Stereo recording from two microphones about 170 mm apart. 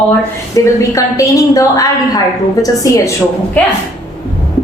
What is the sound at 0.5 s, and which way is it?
A woman's voice, 20° left (ahead or behind).